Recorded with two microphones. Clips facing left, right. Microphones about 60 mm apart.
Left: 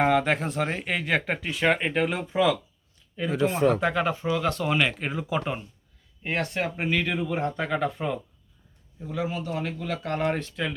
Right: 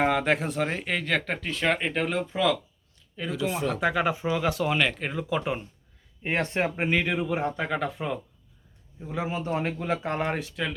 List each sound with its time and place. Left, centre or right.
0.0 s speech: centre
3.3 s speech: left
3.8 s speech: centre
6.2 s speech: right; by 8.2 s centre
9.0 s a man's voice: right
10.4 s speech: centre